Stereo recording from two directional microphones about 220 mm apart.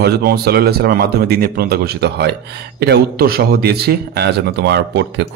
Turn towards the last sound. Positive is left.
turn(degrees=-50)  # may be behind; listen again after turning